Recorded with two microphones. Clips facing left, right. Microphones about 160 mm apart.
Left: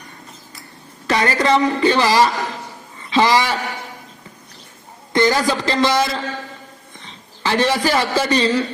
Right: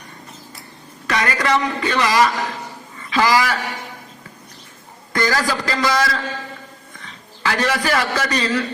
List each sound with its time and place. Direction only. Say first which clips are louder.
1.0 s a man's voice: left 3 dB; 30° left (ahead or behind)
5.1 s a man's voice: left 4 dB; 25° left (ahead or behind)